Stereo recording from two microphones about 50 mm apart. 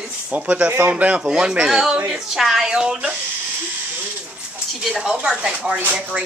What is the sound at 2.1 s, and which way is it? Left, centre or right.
Speech, centre.